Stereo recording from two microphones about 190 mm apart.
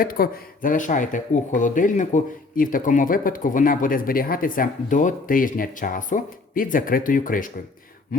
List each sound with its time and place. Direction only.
0.0 s speech: 50° left (ahead or behind)